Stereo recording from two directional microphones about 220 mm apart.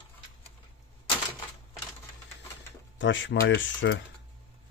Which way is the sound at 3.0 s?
55° left (ahead or behind).